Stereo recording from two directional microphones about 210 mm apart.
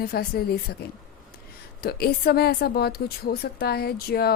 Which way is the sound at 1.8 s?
50° left (ahead or behind).